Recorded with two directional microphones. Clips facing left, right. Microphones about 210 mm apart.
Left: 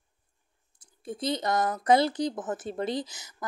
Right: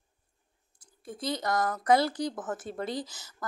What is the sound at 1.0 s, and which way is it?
A woman's voice, 20° left (ahead or behind).